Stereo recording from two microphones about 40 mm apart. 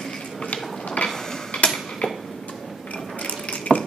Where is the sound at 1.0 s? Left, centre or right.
Left.